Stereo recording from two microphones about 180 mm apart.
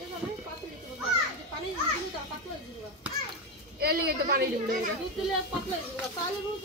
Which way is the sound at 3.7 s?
60° right (ahead or behind).